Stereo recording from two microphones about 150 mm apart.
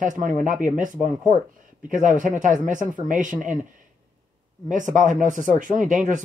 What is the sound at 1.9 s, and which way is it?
Speech, 60° right (ahead or behind).